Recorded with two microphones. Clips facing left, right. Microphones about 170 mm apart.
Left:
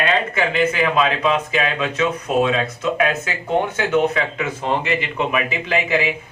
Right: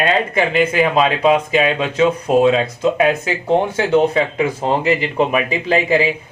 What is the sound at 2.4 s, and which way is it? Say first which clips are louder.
Speech: right 6 dB; 30° right (ahead or behind).